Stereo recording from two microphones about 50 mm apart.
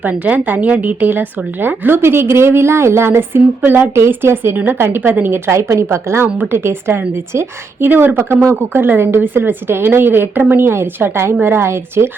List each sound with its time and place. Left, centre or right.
0.0 s a woman's voice: right
4.5 s a woman's voice: right
5.5 s a woman's voice: right